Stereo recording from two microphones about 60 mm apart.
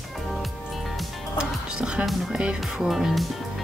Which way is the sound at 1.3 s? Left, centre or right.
Centre.